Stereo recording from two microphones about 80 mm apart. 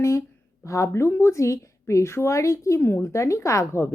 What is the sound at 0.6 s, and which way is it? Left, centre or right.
A woman's voice, left.